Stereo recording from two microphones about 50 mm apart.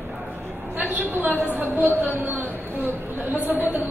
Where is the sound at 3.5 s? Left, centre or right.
Right.